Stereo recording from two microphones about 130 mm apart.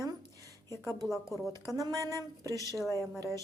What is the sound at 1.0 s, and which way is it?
Speech, 25° left (ahead or behind).